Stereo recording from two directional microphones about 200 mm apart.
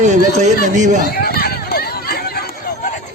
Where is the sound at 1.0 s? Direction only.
50° left (ahead or behind).